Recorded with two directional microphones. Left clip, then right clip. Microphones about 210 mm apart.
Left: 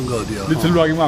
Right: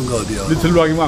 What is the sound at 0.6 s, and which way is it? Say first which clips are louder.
Speech: right 1 dB; 35° left (ahead or behind).